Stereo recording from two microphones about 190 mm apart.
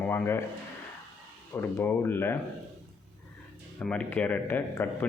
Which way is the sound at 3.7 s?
5° left (ahead or behind).